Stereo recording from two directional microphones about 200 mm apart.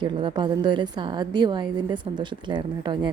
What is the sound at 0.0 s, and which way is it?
A woman's voice, 25° right (ahead or behind).